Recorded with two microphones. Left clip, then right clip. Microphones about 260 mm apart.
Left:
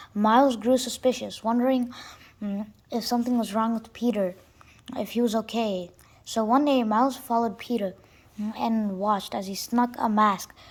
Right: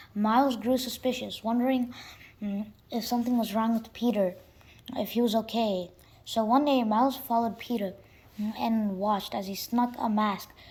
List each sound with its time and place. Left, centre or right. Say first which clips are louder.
0.0 s speech: left 5 dB; centre
4.1 s speech: even; left
4.9 s a woman's voice: left 1 dB; centre